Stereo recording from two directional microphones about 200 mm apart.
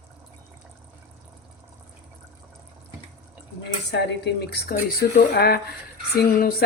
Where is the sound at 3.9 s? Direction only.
55° left (ahead or behind).